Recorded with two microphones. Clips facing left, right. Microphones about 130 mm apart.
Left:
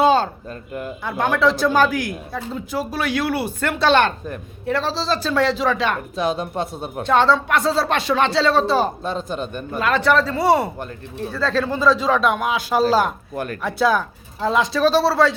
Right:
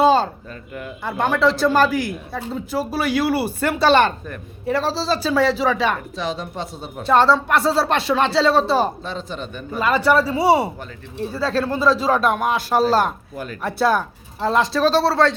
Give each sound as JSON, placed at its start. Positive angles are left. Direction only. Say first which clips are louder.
{"t": 0.0, "sound": "a sound", "louder": "right 1 dB", "side_deg": 0}
{"t": 1.0, "sound": "speech", "louder": "even", "side_deg": 0}
{"t": 6.1, "sound": "speech", "louder": "left 4 dB", "side_deg": 55}
{"t": 7.0, "sound": "speech", "louder": "right 1 dB", "side_deg": -5}
{"t": 9.0, "sound": "speech", "louder": "left 4 dB", "side_deg": 45}
{"t": 9.7, "sound": "speech", "louder": "right 1 dB", "side_deg": -5}
{"t": 13.3, "sound": "speech", "louder": "left 4 dB", "side_deg": 60}
{"t": 13.6, "sound": "speech", "louder": "even", "side_deg": 0}